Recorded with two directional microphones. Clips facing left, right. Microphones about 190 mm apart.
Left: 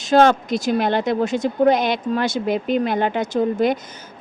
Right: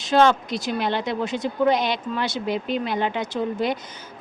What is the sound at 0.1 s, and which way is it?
A woman's voice, 45° left (ahead or behind).